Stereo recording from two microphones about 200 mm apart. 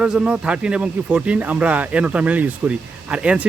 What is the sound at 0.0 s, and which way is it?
Speech, 5° right (ahead or behind).